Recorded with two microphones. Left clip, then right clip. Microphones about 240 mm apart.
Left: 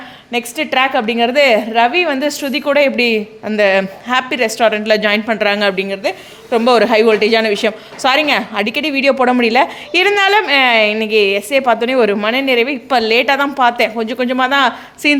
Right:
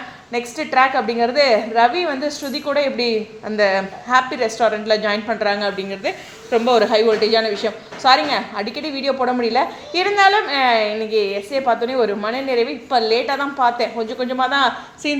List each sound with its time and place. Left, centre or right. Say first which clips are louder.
0.5 s a woman's voice: left 1 dB; left
6.7 s a woman's voice: left 5 dB; left